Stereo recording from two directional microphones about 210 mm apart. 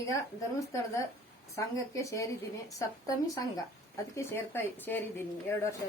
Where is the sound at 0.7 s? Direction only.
15° left (ahead or behind).